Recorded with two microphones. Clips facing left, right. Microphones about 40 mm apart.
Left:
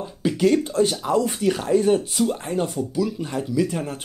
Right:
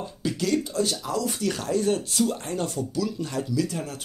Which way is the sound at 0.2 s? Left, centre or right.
Left.